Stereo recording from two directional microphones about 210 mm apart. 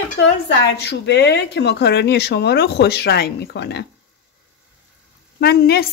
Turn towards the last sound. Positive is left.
turn(degrees=50)  # may be behind; listen again after turning